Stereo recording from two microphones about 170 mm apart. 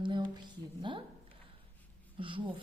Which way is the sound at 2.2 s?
30° right (ahead or behind).